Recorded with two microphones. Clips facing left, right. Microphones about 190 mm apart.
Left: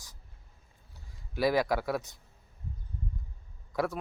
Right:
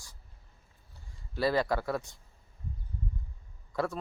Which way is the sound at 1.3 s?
10° left (ahead or behind).